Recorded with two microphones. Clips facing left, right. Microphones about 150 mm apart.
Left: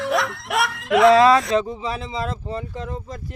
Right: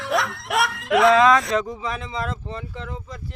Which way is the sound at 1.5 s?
30° left (ahead or behind).